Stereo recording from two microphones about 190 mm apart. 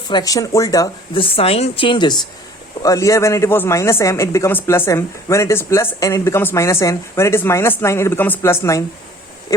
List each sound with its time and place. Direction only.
0.1 s a woman's voice: 20° left (ahead or behind)